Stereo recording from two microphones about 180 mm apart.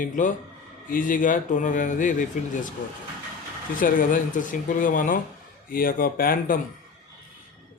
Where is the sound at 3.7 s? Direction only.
50° left (ahead or behind).